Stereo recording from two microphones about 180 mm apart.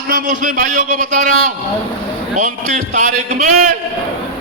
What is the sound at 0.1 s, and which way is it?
A man's voice, 50° right (ahead or behind).